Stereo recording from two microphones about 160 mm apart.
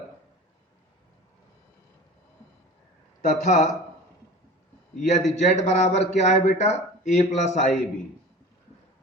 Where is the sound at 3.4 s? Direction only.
50° left (ahead or behind).